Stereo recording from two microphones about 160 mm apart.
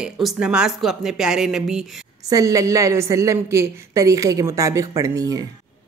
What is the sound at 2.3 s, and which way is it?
Speech, 20° right (ahead or behind).